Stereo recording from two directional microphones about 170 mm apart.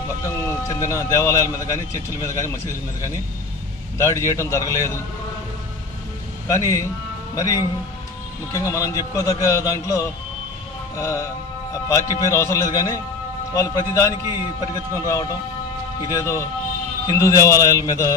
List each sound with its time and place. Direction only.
0.3 s a man's voice: 15° left (ahead or behind)
6.4 s a man's voice: 20° left (ahead or behind)